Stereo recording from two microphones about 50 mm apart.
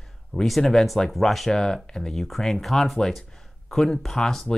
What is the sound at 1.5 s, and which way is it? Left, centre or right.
Speech, centre.